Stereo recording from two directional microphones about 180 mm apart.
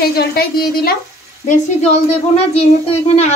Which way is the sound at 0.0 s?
60° left (ahead or behind).